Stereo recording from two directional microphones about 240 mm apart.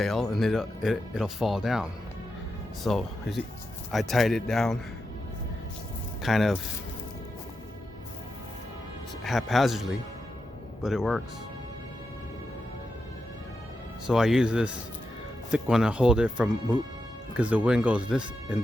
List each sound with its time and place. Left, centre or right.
0.0 s speech: centre
6.2 s speech: centre
9.2 s speech: centre
10.8 s speech: centre
14.1 s speech: centre